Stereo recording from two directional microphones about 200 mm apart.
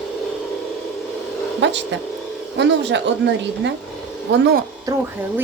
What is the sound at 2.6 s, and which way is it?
A woman's voice, 60° right (ahead or behind).